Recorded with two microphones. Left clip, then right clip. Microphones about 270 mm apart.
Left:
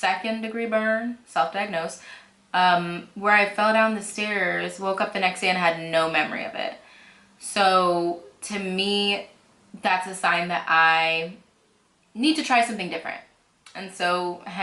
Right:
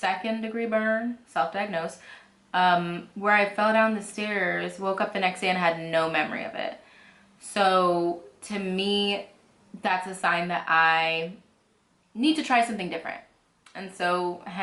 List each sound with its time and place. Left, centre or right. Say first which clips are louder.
0.0 s speech: left 3 dB; centre
7.9 s speech: left 2 dB; centre
8.4 s speech: left 3 dB; centre